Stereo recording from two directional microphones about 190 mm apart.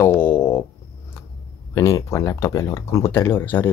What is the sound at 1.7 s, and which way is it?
Speech, 15° left (ahead or behind).